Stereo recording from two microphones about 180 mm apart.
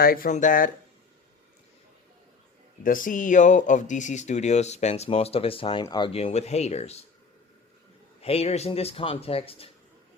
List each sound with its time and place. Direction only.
0.0 s speech: 55° left (ahead or behind)
2.8 s speech: 50° left (ahead or behind)
8.2 s speech: 35° left (ahead or behind)